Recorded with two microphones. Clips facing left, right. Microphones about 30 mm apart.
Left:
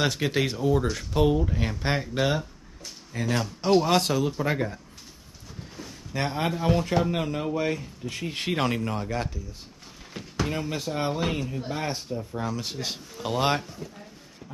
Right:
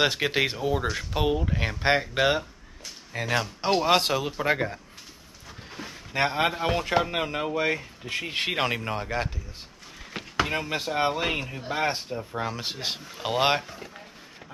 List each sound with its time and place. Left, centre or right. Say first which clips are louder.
0.0 s speech: right 2 dB; right
13.7 s speech: left 1 dB; right